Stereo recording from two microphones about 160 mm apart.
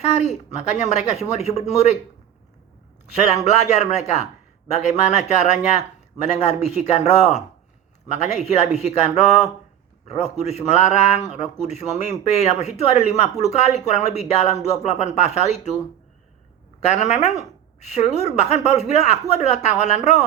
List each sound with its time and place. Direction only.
0.0 s a man's voice: 45° left (ahead or behind)
3.1 s a man's voice: 45° left (ahead or behind)
16.8 s a man's voice: 45° left (ahead or behind)